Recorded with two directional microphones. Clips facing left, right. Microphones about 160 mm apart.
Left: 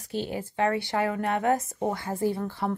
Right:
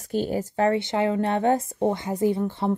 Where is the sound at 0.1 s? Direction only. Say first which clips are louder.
Right 6 dB; 45° right (ahead or behind).